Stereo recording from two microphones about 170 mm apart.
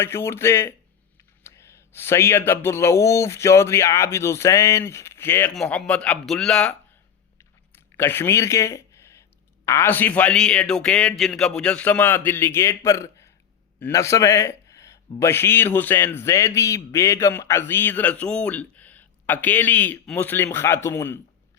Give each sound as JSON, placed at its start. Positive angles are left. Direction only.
{"t": 0.0, "sound": "a man's voice", "side_deg": 15}
{"t": 7.9, "sound": "a man's voice", "side_deg": 15}